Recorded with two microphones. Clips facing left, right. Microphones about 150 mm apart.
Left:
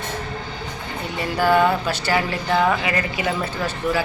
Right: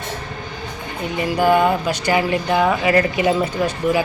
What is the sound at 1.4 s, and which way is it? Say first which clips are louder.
Speech: right 2 dB; 15° right (ahead or behind).